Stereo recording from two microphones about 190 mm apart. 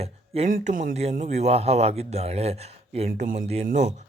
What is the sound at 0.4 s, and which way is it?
Speech, 45° right (ahead or behind).